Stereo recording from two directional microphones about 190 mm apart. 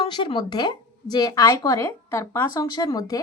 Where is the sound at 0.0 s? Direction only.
25° left (ahead or behind).